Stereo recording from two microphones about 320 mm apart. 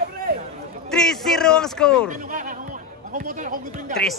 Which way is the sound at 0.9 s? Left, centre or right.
Centre.